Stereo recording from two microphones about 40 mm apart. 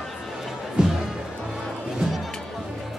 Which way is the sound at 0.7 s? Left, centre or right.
Centre.